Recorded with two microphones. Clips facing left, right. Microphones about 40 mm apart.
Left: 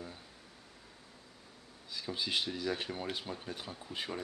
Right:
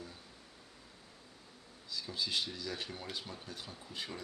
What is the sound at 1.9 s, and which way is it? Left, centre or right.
Speech, left.